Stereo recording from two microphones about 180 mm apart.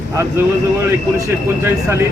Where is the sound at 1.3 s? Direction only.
15° right (ahead or behind).